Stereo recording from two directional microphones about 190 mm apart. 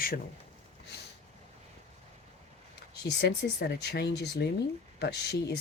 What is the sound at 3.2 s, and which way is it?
Speech, 60° left (ahead or behind).